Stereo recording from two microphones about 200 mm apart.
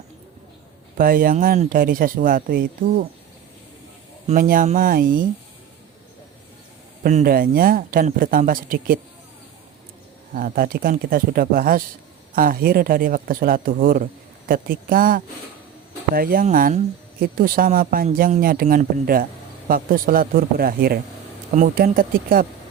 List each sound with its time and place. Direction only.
0.9 s speech: 45° right (ahead or behind)
4.3 s speech: 45° right (ahead or behind)
7.0 s speech: 40° right (ahead or behind)
10.3 s speech: 45° right (ahead or behind)
21.5 s speech: 40° right (ahead or behind)